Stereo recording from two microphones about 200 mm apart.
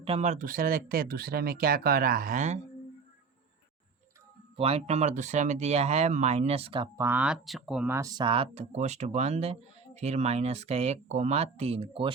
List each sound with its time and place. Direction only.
0.0 s speech: 30° right (ahead or behind)
4.5 s speech: 30° right (ahead or behind)
7.0 s speech: 5° right (ahead or behind); by 12.1 s 30° right (ahead or behind)